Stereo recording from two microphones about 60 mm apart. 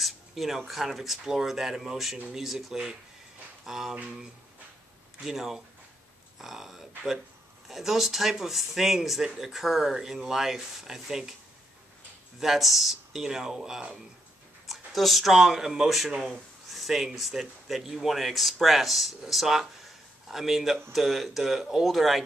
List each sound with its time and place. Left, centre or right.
0.0 s a sound: centre
0.7 s speech: centre
5.2 s speech: centre
12.4 s speech: centre